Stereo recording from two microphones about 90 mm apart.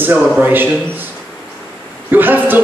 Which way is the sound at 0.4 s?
20° right (ahead or behind).